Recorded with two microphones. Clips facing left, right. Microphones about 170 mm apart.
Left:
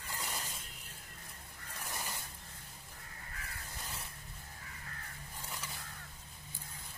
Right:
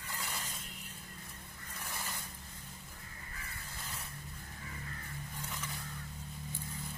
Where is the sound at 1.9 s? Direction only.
15° left (ahead or behind).